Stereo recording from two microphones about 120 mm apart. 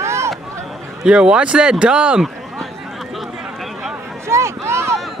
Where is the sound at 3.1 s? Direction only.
Centre (ahead or behind).